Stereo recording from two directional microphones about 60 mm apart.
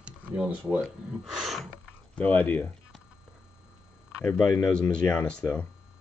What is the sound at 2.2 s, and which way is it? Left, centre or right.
Speech, left.